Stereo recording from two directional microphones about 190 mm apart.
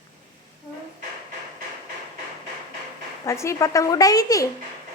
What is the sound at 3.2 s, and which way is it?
A woman's voice, 15° left (ahead or behind).